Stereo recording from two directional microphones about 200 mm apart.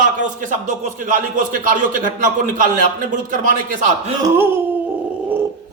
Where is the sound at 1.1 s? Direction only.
40° right (ahead or behind).